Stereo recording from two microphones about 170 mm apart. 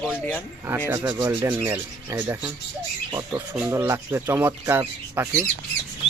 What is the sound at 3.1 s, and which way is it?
Speech, 20° right (ahead or behind).